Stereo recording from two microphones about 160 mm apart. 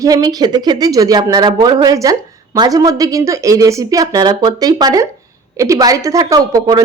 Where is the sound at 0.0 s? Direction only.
25° right (ahead or behind).